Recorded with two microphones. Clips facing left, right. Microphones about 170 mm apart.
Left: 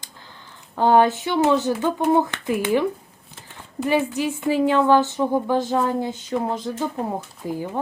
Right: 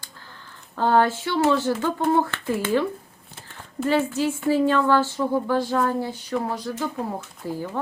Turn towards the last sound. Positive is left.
turn(degrees=15)  # may be behind; listen again after turning